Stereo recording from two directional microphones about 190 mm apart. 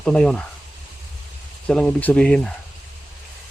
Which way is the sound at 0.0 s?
5° left (ahead or behind).